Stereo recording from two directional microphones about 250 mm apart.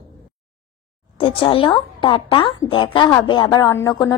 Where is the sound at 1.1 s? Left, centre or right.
Left.